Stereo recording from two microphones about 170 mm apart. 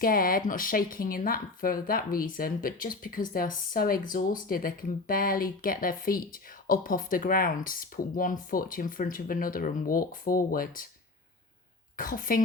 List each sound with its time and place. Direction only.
0.0 s a woman's voice: 60° left (ahead or behind)
11.9 s a woman's voice: 55° left (ahead or behind)